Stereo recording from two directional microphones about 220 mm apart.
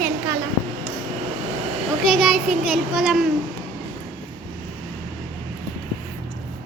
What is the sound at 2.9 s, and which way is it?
Speech, centre (ahead or behind).